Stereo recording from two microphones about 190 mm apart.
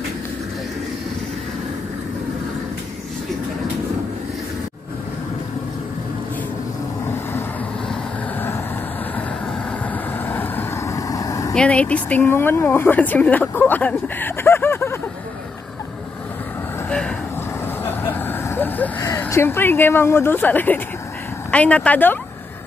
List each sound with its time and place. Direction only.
10.2 s vehicle: 10° left (ahead or behind)
11.5 s speech: 5° left (ahead or behind)
17.8 s vehicle: 10° left (ahead or behind)
21.5 s speech: 5° left (ahead or behind)